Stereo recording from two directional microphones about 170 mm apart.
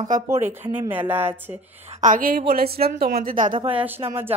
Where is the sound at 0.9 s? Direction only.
10° right (ahead or behind).